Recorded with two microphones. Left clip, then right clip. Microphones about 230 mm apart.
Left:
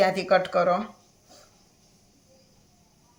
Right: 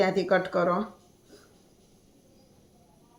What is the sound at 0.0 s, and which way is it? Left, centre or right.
Speech, left.